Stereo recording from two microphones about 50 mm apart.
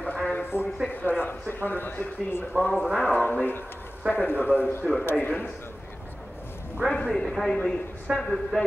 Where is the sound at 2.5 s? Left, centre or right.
Centre.